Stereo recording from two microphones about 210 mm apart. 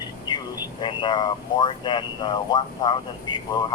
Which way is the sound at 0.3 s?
20° left (ahead or behind).